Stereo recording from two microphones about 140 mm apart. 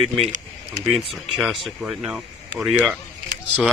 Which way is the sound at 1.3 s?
Centre (ahead or behind).